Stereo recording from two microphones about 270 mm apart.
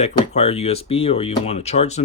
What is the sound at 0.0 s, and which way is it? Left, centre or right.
Speech, left.